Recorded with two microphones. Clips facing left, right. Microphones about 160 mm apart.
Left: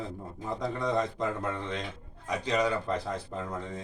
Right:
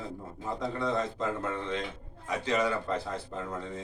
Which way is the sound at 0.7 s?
15° left (ahead or behind).